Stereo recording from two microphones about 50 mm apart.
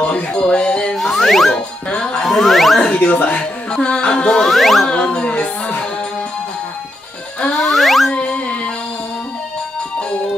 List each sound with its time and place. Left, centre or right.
0.0 s music: left
0.9 s music: centre
1.9 s speech: centre
2.2 s music: centre
2.9 s speech: left; by 4.8 s centre
4.8 s music: centre
7.5 s music: centre
8.1 s music: left